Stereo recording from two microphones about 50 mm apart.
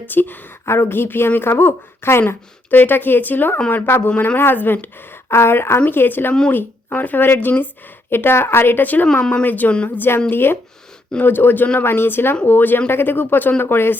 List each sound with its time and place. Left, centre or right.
0.1 s a woman's voice: left
0.6 s a woman's voice: left
2.2 s a woman's voice: left
5.3 s a woman's voice: left
5.9 s a woman's voice: left
8.1 s a woman's voice: left